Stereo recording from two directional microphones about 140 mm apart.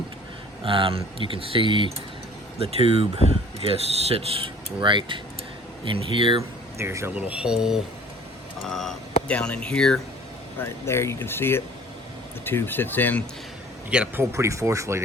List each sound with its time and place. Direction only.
0.6 s speech: 40° right (ahead or behind)
6.7 s speech: 20° right (ahead or behind); by 10.0 s 5° left (ahead or behind)
10.6 s speech: 20° left (ahead or behind)
13.9 s speech: 10° right (ahead or behind)
14.3 s speech: 20° right (ahead or behind)